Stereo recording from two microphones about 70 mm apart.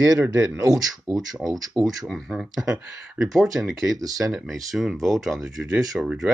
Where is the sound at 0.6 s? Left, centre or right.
Right.